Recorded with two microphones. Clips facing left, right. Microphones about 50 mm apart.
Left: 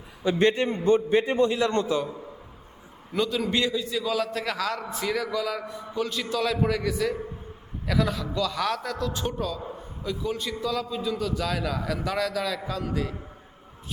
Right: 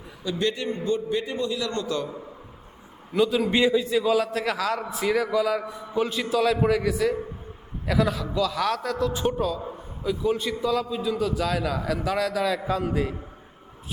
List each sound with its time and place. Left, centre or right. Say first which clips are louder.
0.3 s a man's voice: left 4 dB; left
3.1 s a man's voice: right 4 dB; centre